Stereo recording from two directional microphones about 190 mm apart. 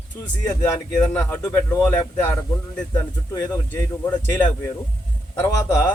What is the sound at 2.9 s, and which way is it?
A man's voice, 15° left (ahead or behind).